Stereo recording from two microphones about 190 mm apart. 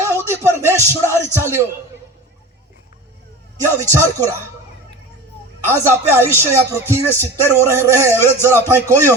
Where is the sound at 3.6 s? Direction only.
15° right (ahead or behind).